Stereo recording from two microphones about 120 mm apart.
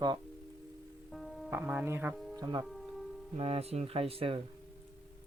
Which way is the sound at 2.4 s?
35° right (ahead or behind).